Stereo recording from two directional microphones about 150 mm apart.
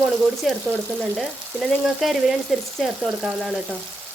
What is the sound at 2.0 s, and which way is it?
Frying, centre (ahead or behind).